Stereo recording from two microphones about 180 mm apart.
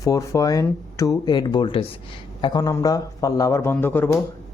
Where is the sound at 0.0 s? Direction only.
20° left (ahead or behind).